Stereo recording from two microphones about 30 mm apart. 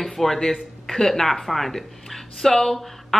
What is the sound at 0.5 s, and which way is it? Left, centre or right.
Speech, centre.